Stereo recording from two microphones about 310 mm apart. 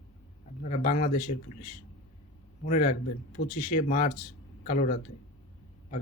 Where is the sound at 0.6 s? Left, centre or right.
Left.